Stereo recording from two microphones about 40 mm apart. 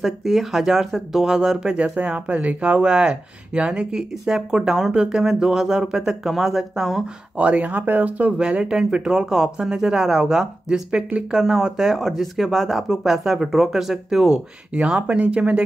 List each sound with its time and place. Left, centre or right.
0.0 s speech: centre
7.3 s speech: right
8.4 s speech: right
10.7 s speech: right
11.3 s speech: centre
14.7 s speech: right